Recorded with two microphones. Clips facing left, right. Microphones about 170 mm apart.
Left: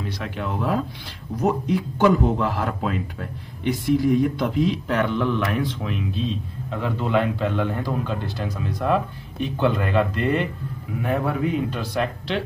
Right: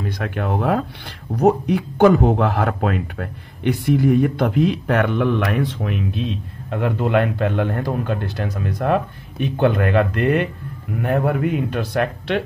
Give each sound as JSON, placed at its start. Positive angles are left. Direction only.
{"t": 0.0, "sound": "speech", "side_deg": -55}